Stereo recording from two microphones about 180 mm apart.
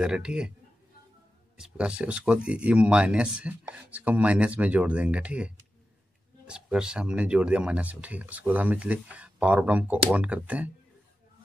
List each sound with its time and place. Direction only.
0.0 s a man's voice: 5° right (ahead or behind)
1.6 s speech: 5° right (ahead or behind)